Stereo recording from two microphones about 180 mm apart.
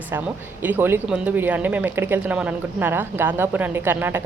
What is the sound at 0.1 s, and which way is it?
Speech, 10° right (ahead or behind).